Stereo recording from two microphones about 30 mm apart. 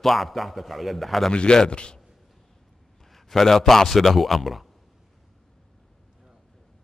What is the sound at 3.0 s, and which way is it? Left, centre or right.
A man's voice, centre.